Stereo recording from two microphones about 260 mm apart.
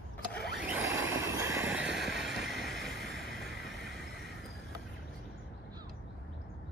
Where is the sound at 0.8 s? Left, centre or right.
Right.